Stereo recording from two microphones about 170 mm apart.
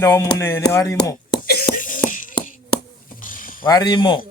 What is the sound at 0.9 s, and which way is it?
Chopping, 20° left (ahead or behind).